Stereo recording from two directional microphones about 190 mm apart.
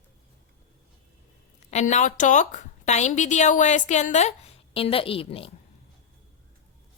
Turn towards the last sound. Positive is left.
turn(degrees=30)  # may be behind; listen again after turning